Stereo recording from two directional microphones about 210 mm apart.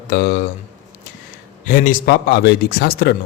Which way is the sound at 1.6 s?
40° left (ahead or behind).